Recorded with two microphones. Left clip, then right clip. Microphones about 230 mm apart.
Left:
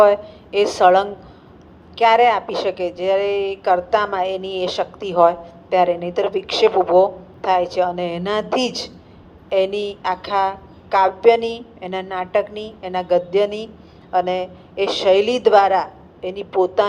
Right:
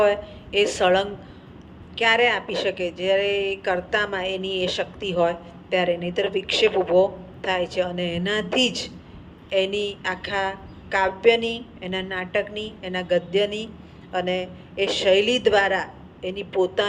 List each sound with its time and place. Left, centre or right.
0.0 s a woman's voice: left